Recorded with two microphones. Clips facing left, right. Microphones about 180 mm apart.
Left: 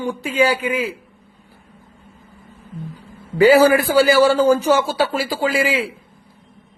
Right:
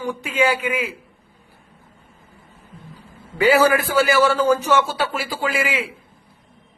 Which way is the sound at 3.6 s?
35° left (ahead or behind).